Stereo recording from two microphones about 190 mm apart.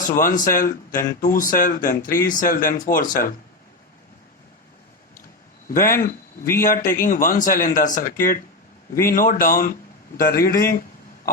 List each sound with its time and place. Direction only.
0.0 s speech: 45° left (ahead or behind)
5.6 s speech: 50° left (ahead or behind)